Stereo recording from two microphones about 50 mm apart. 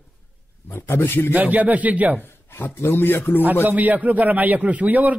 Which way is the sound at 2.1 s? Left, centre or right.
Left.